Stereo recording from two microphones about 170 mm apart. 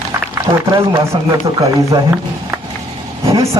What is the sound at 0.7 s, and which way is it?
Speech, 20° right (ahead or behind).